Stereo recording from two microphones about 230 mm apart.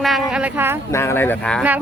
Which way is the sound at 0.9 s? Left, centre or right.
Centre.